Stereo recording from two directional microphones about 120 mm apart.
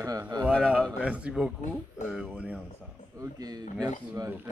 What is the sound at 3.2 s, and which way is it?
Speech, 30° right (ahead or behind).